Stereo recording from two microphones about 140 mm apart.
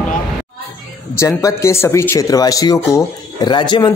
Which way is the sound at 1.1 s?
20° left (ahead or behind).